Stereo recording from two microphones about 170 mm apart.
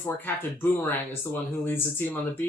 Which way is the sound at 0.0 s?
10° left (ahead or behind).